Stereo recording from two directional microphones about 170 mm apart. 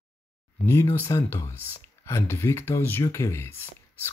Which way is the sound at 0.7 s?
15° left (ahead or behind).